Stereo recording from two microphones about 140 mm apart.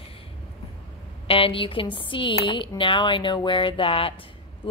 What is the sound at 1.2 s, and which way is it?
Speech, 40° left (ahead or behind).